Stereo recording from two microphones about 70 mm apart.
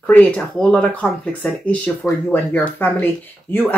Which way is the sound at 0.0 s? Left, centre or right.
Centre.